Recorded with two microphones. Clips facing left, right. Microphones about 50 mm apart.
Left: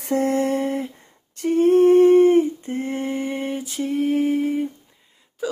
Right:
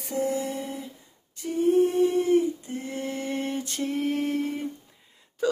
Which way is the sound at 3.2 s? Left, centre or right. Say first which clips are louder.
Left 4 dB; centre.